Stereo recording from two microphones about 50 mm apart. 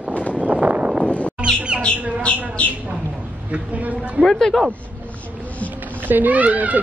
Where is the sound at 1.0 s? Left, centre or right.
Left.